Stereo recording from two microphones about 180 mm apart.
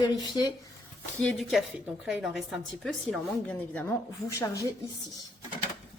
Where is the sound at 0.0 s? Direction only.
20° left (ahead or behind).